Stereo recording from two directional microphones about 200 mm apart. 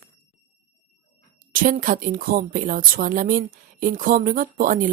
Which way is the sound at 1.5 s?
45° right (ahead or behind).